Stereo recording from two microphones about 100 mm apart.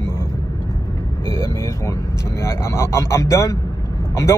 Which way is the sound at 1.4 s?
30° left (ahead or behind).